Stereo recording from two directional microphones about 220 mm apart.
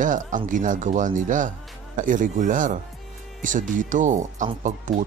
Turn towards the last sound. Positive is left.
turn(degrees=-35)  # may be behind; listen again after turning